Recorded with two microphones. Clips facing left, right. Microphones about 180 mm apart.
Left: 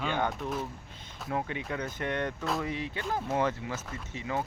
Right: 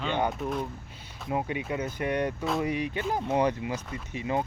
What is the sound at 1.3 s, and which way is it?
Speech, 15° right (ahead or behind).